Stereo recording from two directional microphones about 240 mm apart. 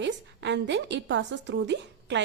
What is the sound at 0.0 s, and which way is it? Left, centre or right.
A woman's voice, right.